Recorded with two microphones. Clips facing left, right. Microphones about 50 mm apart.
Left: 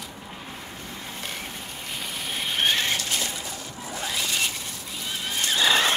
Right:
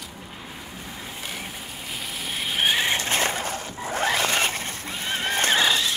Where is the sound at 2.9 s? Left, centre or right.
Right.